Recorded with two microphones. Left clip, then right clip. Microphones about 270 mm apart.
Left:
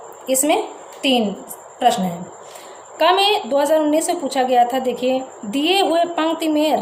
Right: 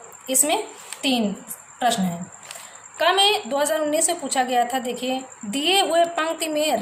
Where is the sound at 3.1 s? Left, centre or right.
Right.